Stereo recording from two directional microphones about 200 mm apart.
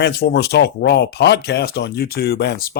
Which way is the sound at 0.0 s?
55° left (ahead or behind).